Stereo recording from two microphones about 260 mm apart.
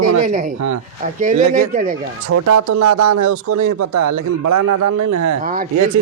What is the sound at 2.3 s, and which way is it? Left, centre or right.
Speech, right.